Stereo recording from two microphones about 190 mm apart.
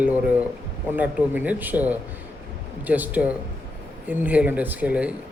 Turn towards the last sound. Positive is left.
turn(degrees=-5)  # may be behind; listen again after turning